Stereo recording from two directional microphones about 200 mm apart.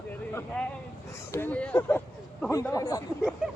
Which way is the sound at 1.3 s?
10° left (ahead or behind).